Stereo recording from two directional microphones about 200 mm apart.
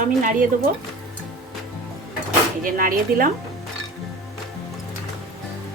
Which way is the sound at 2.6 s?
45° right (ahead or behind).